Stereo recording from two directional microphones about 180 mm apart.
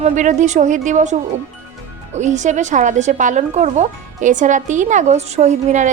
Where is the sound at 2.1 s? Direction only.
40° right (ahead or behind).